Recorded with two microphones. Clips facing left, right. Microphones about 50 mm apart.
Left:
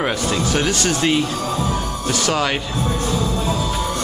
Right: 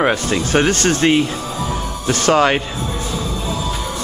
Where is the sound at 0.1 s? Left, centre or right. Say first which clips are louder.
Right 3 dB; right.